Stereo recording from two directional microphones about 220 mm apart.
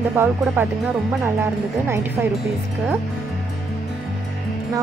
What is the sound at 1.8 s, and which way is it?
Speech, 10° right (ahead or behind).